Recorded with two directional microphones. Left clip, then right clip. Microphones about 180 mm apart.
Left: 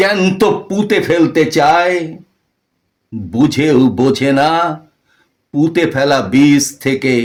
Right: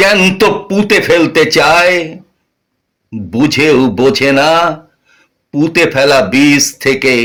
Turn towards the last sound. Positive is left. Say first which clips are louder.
# right 5 dB
turn(degrees=-5)  # may be behind; listen again after turning